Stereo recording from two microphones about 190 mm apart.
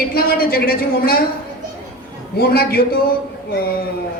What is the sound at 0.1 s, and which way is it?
A woman's voice, 50° left (ahead or behind).